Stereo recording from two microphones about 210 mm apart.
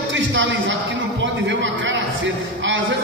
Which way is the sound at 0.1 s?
60° right (ahead or behind).